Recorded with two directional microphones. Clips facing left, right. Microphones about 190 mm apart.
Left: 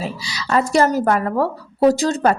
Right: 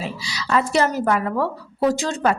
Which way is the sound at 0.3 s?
40° left (ahead or behind).